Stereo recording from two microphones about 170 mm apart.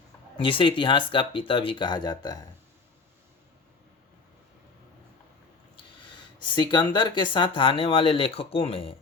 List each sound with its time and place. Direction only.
0.3 s speech: 30° left (ahead or behind)
5.7 s speech: 25° left (ahead or behind)